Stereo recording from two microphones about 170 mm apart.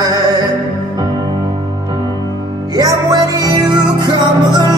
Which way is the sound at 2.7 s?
25° right (ahead or behind).